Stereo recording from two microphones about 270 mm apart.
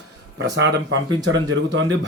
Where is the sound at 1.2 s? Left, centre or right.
Right.